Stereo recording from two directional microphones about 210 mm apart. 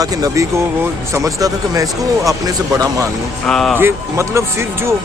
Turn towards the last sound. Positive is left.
turn(degrees=-10)  # may be behind; listen again after turning